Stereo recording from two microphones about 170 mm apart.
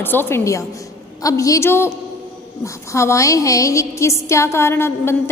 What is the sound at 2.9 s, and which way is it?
A woman's voice, 15° left (ahead or behind).